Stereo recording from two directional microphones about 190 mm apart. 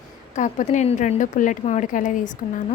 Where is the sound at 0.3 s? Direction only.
40° left (ahead or behind).